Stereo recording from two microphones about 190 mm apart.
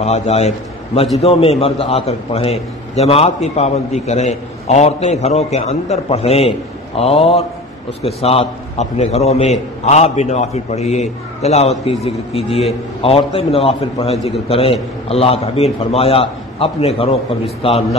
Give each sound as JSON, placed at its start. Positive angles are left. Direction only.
{"t": 0.0, "sound": "a man's voice", "side_deg": 35}